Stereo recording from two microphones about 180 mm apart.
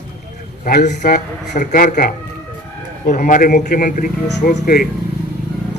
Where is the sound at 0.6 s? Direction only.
55° left (ahead or behind).